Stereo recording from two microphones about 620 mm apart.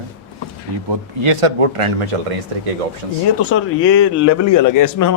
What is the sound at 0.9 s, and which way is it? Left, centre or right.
Speech, right.